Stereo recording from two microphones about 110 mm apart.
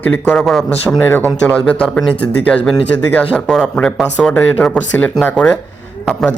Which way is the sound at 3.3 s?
5° left (ahead or behind).